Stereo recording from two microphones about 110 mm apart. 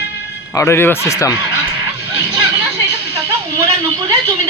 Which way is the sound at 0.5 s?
25° left (ahead or behind).